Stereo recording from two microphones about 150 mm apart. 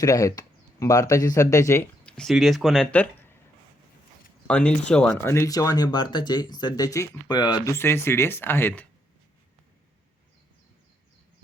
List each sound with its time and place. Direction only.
0.0 s speech: 20° left (ahead or behind)
2.0 s speech: 5° left (ahead or behind)
4.4 s speech: 5° left (ahead or behind)
5.2 s speech: 20° left (ahead or behind)